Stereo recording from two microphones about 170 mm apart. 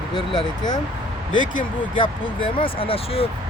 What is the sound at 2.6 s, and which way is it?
Speech, 35° left (ahead or behind).